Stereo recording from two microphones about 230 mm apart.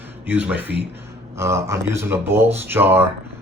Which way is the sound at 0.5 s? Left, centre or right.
Right.